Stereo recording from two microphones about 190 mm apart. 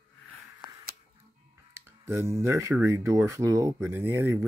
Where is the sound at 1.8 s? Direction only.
15° right (ahead or behind).